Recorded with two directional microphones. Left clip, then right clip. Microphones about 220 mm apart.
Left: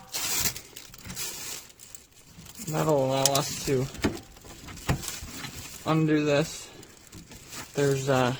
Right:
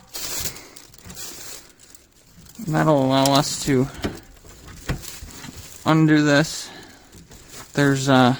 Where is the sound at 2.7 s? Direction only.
50° right (ahead or behind).